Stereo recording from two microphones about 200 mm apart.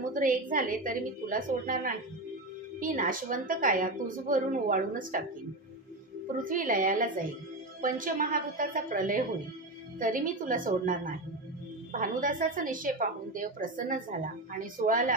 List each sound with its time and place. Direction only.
0.1 s a woman's voice: 45° right (ahead or behind)
6.2 s a woman's voice: 40° right (ahead or behind)